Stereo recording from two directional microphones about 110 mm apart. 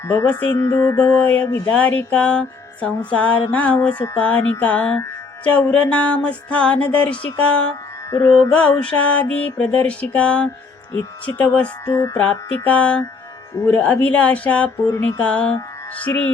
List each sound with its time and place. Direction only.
0.0 s music: 25° left (ahead or behind)
0.5 s mantra: 30° left (ahead or behind)
0.9 s music: 15° left (ahead or behind)
11.9 s music: 30° left (ahead or behind)
12.1 s music: 10° left (ahead or behind)